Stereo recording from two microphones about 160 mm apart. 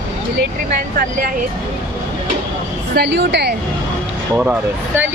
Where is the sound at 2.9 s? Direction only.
90° right.